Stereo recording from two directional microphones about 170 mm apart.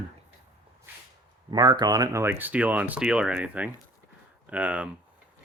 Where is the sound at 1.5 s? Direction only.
25° right (ahead or behind); by 4.9 s 10° right (ahead or behind).